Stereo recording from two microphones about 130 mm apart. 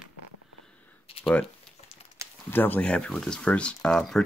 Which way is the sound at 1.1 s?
45° left (ahead or behind).